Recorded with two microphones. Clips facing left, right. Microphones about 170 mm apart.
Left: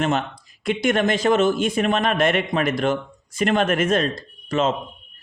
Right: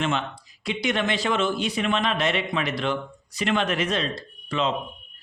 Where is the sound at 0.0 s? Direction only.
45° left (ahead or behind).